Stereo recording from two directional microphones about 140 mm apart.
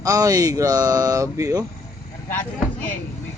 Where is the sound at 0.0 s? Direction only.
25° right (ahead or behind).